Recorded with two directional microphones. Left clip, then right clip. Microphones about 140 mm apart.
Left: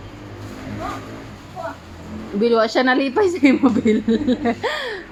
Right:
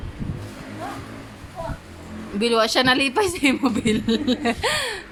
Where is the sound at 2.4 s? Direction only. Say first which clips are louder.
Left 2 dB; 25° right (ahead or behind).